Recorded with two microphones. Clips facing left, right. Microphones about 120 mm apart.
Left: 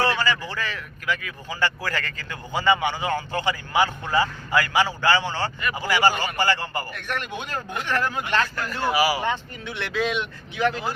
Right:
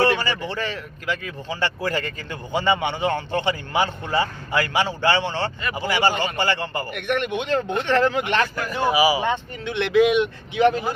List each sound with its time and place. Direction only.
0.0 s speech: 25° right (ahead or behind)